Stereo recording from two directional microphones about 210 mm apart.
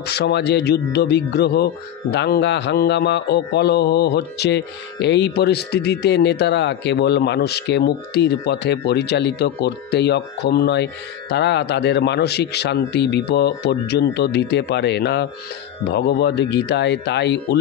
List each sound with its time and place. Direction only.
0.1 s speech: 50° left (ahead or behind)